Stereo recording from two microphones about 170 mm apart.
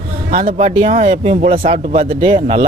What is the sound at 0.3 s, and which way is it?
Speech, 45° right (ahead or behind).